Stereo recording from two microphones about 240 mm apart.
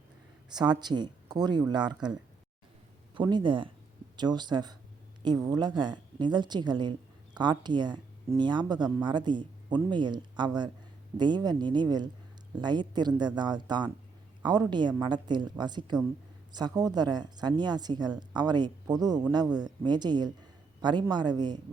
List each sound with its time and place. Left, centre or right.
0.5 s speech: centre
3.2 s speech: centre